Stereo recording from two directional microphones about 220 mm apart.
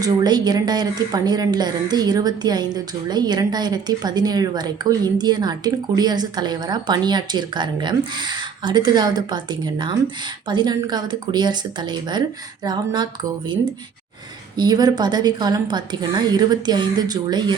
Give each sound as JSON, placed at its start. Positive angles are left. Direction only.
{"t": 0.0, "sound": "speech", "side_deg": -15}
{"t": 14.5, "sound": "speech", "side_deg": -20}